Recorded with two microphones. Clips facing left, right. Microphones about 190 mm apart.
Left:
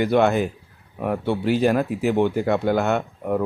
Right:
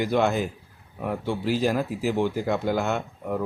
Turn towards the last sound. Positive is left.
turn(degrees=60)  # may be behind; listen again after turning